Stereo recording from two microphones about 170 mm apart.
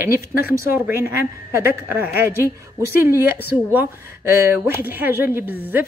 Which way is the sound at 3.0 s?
15° right (ahead or behind).